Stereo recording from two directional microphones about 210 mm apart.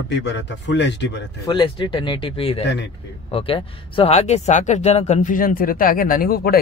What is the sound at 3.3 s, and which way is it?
Speech, 25° left (ahead or behind).